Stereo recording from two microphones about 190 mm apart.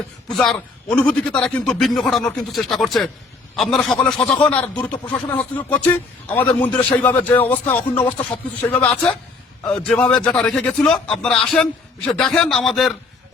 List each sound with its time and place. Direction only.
0.3 s a man's voice: centre (ahead or behind)